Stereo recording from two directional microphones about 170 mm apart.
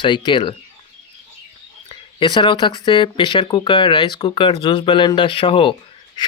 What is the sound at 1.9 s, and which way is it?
Speech, 30° left (ahead or behind).